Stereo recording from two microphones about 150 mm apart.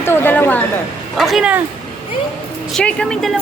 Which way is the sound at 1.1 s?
Centre (ahead or behind).